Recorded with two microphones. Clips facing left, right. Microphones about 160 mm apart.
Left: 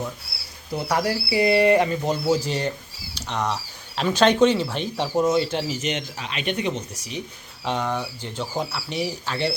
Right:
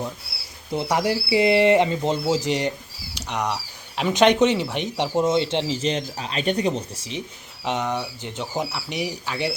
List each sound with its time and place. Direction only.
0.7 s speech: 20° right (ahead or behind)